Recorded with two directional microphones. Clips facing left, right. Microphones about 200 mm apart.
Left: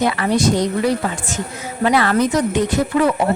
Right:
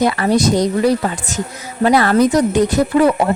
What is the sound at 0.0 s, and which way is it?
Speech, 40° right (ahead or behind).